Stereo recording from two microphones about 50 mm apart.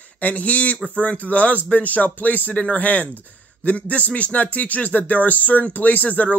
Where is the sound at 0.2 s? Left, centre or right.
Left.